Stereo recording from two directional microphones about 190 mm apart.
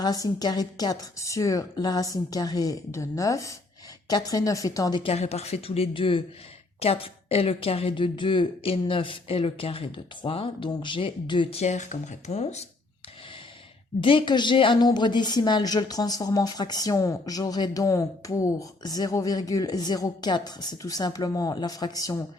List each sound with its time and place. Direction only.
0.0 s a woman's voice: 20° left (ahead or behind)
14.0 s a woman's voice: 25° left (ahead or behind)